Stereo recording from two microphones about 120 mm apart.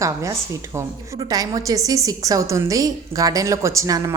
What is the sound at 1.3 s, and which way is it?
A woman's voice, 30° right (ahead or behind).